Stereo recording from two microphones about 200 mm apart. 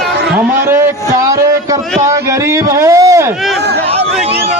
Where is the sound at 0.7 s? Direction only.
15° right (ahead or behind).